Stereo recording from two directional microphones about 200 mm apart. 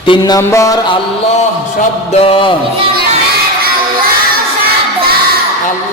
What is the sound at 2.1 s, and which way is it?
Music, 30° left (ahead or behind).